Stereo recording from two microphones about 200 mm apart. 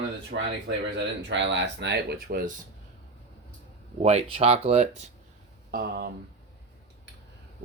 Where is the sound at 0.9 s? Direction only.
65° right (ahead or behind).